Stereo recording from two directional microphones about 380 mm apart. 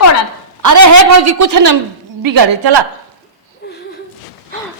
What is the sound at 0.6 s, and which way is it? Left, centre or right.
A man's voice, right.